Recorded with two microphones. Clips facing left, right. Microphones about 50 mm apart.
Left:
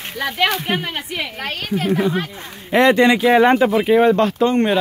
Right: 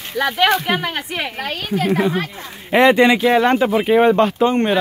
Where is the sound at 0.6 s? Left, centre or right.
Right.